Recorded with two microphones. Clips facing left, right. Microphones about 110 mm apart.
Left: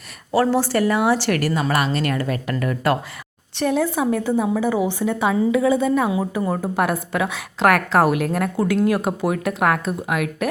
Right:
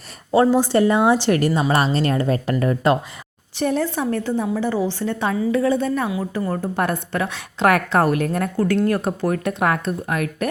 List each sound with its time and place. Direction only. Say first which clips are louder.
0.3 s a woman's voice: right 3 dB; 20° right (ahead or behind)
3.5 s a woman's voice: left 1 dB; centre (ahead or behind)